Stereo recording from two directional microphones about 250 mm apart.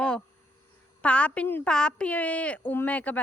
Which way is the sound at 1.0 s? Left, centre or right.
Centre.